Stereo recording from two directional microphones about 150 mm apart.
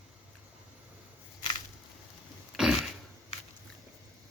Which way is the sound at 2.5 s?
5° right (ahead or behind).